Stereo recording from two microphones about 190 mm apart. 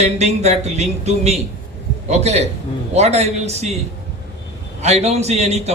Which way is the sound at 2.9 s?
35° right (ahead or behind).